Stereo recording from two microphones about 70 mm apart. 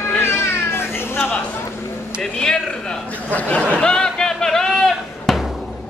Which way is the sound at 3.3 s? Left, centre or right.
Centre.